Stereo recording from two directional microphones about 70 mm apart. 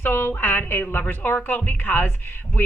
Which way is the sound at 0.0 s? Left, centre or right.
Left.